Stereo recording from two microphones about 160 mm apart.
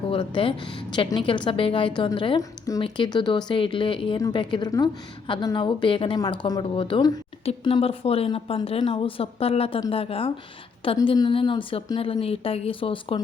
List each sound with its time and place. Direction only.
0.1 s a woman's voice: 35° left (ahead or behind)
2.4 s a woman's voice: 20° left (ahead or behind)
2.8 s a woman's voice: 30° left (ahead or behind)